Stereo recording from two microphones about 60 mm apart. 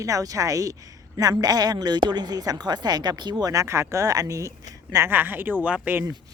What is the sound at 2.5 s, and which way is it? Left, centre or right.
Speech, right.